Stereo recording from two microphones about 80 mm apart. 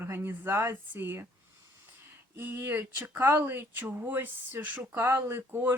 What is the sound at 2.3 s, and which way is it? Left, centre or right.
Speech, right.